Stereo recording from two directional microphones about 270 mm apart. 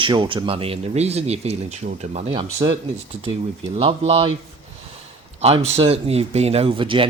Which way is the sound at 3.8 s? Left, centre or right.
Right.